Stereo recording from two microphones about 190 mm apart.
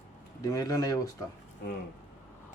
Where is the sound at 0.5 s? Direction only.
20° left (ahead or behind).